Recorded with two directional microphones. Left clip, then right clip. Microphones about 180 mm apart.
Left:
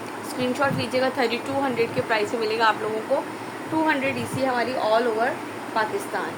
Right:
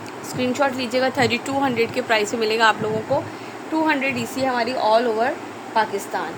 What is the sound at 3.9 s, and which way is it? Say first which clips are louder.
Speech: right 2 dB; 55° right (ahead or behind).